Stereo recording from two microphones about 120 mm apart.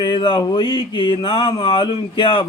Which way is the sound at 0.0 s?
40° left (ahead or behind).